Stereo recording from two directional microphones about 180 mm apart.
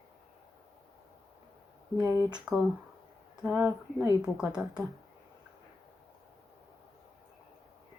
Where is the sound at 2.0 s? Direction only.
20° right (ahead or behind).